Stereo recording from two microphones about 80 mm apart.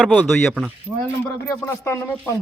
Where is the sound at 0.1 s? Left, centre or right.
Centre.